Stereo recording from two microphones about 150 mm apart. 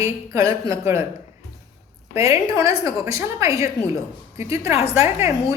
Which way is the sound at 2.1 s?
20° right (ahead or behind).